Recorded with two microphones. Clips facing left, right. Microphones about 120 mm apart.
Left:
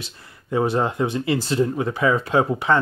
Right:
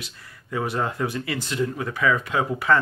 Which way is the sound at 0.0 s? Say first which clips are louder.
Left 2 dB; 30° left (ahead or behind).